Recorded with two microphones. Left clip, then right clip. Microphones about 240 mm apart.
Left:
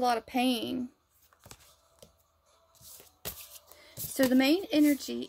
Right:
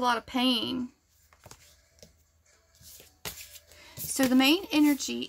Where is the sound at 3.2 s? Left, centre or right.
Left.